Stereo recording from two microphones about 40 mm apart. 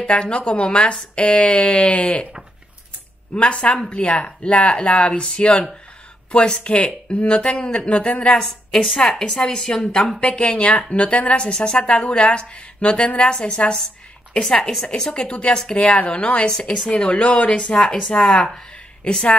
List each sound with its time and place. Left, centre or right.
0.0 s speech: left
3.3 s speech: left
9.4 s speech: centre
14.4 s a woman's voice: centre
15.0 s speech: left